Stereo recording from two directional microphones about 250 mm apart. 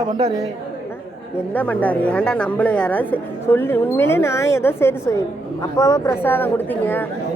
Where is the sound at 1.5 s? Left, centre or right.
Centre.